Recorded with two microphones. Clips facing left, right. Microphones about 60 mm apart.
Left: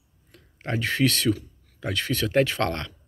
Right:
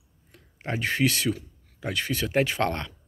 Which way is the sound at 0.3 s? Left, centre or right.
Centre.